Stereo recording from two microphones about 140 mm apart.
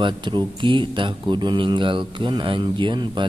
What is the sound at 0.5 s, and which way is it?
Speech, 35° right (ahead or behind).